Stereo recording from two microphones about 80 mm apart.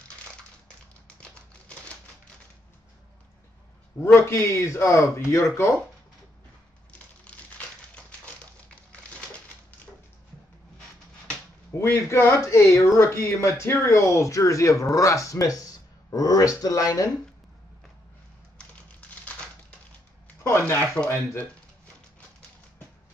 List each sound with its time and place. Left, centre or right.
4.0 s speech: left
6.9 s crumpling: centre
11.7 s speech: left
20.4 s speech: left